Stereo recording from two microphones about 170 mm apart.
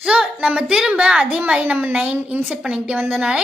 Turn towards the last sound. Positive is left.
turn(degrees=-5)  # may be behind; listen again after turning